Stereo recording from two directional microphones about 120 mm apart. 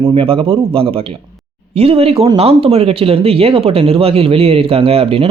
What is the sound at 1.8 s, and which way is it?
Speech, 55° right (ahead or behind).